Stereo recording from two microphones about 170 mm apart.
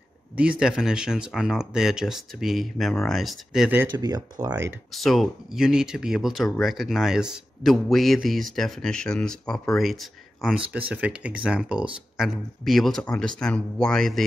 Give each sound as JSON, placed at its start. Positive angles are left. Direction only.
{"t": 0.4, "sound": "speech", "side_deg": -5}
{"t": 4.0, "sound": "speech", "side_deg": -25}
{"t": 4.9, "sound": "speech", "side_deg": 0}